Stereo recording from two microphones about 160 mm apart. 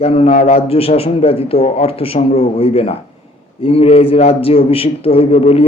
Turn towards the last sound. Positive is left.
turn(degrees=40)  # may be behind; listen again after turning